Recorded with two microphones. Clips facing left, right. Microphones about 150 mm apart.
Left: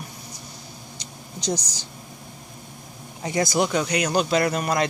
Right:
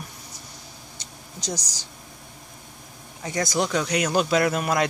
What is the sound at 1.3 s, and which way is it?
Speech, 25° left (ahead or behind).